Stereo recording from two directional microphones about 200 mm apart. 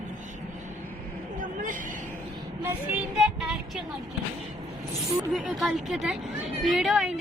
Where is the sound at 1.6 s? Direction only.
40° right (ahead or behind).